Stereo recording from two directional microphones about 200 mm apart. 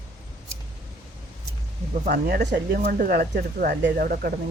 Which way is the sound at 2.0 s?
55° right (ahead or behind).